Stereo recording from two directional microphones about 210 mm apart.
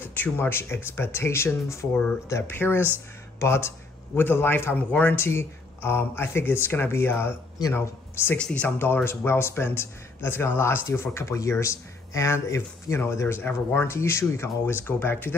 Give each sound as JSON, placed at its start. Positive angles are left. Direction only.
{"t": 0.0, "sound": "speech", "side_deg": 10}